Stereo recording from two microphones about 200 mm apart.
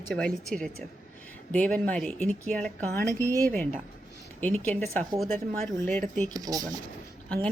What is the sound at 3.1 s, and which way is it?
Speech, 15° right (ahead or behind).